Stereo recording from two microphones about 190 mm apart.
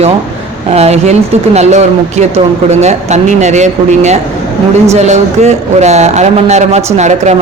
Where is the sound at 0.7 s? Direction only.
35° right (ahead or behind).